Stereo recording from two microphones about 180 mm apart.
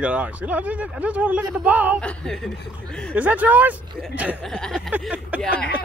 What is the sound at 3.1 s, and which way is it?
Speech, 10° right (ahead or behind).